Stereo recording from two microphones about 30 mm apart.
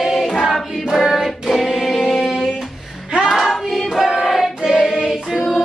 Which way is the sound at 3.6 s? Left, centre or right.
Centre.